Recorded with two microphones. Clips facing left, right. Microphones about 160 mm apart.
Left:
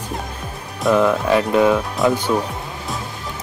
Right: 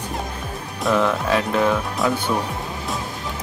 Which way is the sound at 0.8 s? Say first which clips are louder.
Left 4 dB; 5° left (ahead or behind).